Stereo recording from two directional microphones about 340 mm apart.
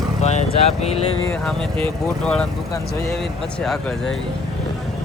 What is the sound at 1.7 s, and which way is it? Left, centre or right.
Speech, centre.